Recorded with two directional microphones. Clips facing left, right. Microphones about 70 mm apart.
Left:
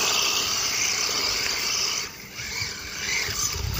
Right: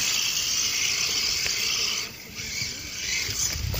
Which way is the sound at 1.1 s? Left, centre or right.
Left.